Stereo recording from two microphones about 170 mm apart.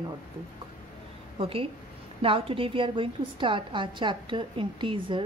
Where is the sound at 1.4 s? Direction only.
35° right (ahead or behind).